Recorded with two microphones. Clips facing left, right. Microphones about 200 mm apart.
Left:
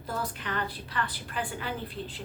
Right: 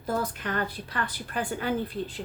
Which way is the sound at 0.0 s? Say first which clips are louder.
Right 5 dB; 45° right (ahead or behind).